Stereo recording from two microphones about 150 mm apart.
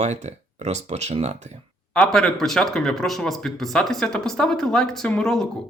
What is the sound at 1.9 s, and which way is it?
Speech, 5° left (ahead or behind).